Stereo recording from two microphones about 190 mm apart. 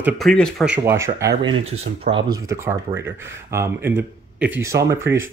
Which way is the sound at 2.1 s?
50° right (ahead or behind).